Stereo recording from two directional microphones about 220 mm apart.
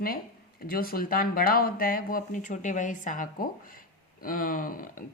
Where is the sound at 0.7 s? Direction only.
40° left (ahead or behind).